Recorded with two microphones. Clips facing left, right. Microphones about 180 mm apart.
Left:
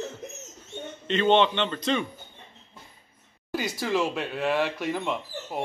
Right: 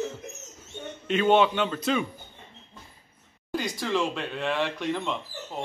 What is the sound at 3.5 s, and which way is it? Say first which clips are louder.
Speech: left 1 dB; 5° left (ahead or behind).